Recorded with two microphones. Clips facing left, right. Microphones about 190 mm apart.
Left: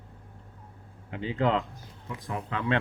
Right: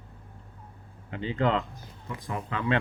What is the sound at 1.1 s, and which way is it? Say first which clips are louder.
Speech: even; 5° left (ahead or behind).